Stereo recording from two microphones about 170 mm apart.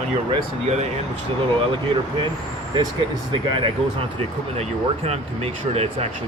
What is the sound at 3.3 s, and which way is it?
Speech, 30° right (ahead or behind).